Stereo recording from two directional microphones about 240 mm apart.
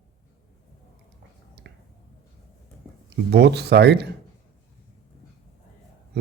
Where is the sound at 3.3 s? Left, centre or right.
Right.